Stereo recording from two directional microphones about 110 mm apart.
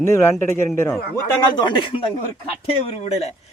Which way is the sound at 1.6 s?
50° left (ahead or behind).